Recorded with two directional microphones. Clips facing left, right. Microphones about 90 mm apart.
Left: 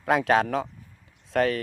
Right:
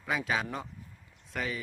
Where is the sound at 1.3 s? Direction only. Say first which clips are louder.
Left 12 dB; 70° left (ahead or behind).